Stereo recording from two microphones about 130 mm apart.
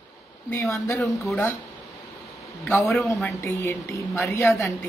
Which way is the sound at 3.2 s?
15° left (ahead or behind).